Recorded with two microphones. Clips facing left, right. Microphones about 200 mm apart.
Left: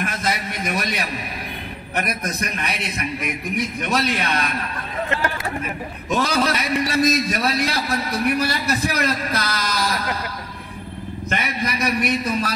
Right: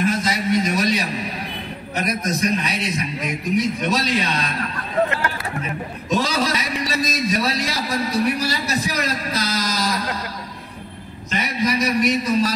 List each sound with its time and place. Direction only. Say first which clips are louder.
0.0 s a sound: right 4 dB; 55° left (ahead or behind)
2.0 s a man's voice: right 3 dB; 55° left (ahead or behind)
6.0 s a man's voice: left 1 dB; 55° left (ahead or behind)
11.2 s a man's voice: right 3 dB; 55° left (ahead or behind)